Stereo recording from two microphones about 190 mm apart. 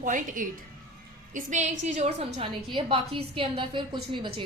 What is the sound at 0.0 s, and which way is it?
A woman's voice, 45° right (ahead or behind).